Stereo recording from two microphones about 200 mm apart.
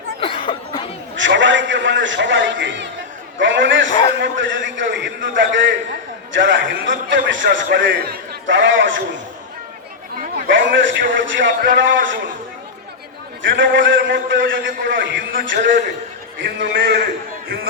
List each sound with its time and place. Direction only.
0.2 s a sound: 25° left (ahead or behind)
1.1 s a man's voice: 65° right (ahead or behind)
10.5 s a man's voice: 70° right (ahead or behind)
13.4 s a man's voice: 70° right (ahead or behind)
15.4 s a man's voice: 55° right (ahead or behind)